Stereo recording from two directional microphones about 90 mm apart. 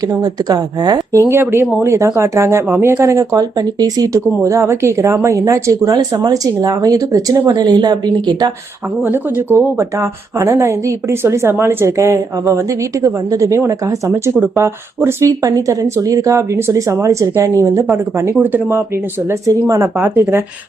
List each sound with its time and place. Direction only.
0.2 s speech: 45° right (ahead or behind)
1.3 s speech: 30° right (ahead or behind); by 8.4 s 50° right (ahead or behind)
9.0 s speech: 25° right (ahead or behind)
18.3 s speech: 20° right (ahead or behind)
19.3 s speech: 40° right (ahead or behind)
20.0 s speech: 25° right (ahead or behind)